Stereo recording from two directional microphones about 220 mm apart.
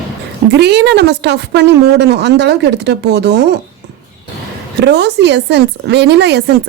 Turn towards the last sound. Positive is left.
turn(degrees=-50)  # may be behind; listen again after turning